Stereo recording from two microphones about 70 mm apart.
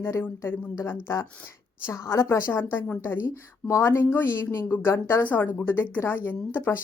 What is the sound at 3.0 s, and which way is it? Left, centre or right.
A woman's voice, left.